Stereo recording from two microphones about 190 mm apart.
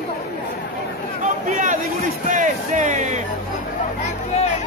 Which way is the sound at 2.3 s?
40° right (ahead or behind).